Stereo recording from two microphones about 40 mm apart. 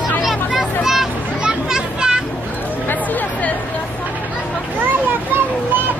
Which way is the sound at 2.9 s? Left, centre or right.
Left.